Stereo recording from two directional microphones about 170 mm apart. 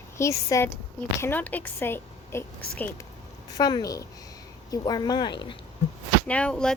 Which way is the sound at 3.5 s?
20° left (ahead or behind).